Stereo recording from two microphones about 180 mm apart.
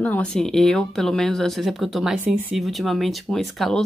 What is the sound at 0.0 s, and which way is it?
Speech, 5° left (ahead or behind).